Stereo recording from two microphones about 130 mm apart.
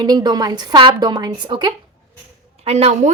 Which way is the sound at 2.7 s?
55° right (ahead or behind).